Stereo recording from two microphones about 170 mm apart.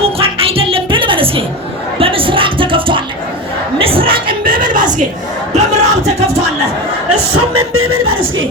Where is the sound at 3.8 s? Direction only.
35° right (ahead or behind).